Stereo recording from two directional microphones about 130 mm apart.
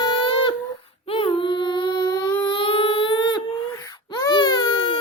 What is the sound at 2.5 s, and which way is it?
Baby cry, 40° left (ahead or behind).